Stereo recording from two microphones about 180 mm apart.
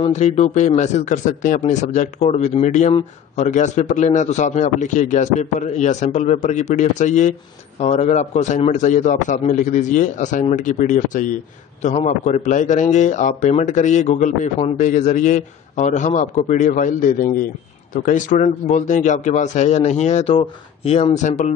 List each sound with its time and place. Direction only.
0.0 s a man's voice: 40° left (ahead or behind)